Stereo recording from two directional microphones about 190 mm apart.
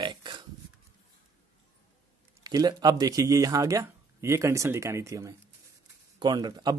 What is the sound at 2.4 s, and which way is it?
Speech, 20° right (ahead or behind).